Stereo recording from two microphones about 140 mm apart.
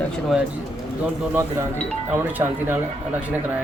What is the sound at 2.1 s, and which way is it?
Speech, 15° right (ahead or behind).